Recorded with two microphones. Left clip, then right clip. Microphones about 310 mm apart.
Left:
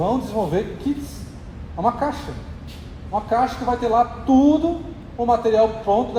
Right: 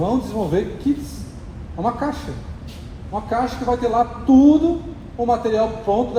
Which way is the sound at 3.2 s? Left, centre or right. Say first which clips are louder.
Even; left.